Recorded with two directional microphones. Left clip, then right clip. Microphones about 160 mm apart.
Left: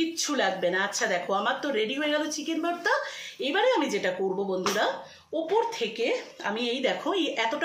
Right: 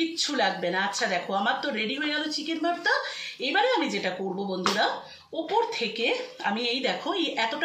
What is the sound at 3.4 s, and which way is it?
Speech, 40° left (ahead or behind).